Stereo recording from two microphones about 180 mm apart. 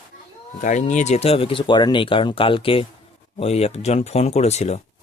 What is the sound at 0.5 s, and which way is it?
Speech, 45° left (ahead or behind).